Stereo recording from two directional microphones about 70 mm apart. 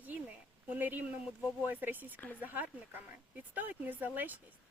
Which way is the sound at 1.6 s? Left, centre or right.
Right.